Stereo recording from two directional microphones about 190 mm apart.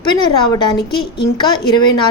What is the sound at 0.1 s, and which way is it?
A woman's voice, 25° left (ahead or behind).